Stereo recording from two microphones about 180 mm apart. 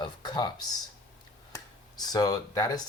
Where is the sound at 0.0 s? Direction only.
25° left (ahead or behind).